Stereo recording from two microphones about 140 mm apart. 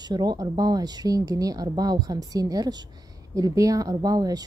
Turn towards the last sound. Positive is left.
turn(degrees=-25)  # may be behind; listen again after turning